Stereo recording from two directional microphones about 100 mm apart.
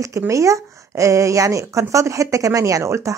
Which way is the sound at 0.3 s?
30° right (ahead or behind).